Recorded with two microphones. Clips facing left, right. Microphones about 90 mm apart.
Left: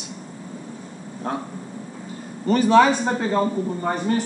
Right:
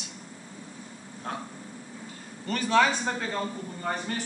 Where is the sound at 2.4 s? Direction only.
20° left (ahead or behind).